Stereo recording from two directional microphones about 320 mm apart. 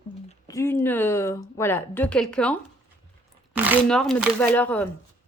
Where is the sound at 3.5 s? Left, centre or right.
Centre.